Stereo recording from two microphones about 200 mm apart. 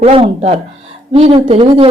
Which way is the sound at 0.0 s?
30° right (ahead or behind).